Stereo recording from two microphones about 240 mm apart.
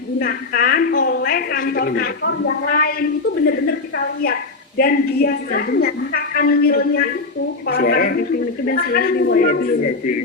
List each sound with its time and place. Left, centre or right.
0.2 s a woman's voice: left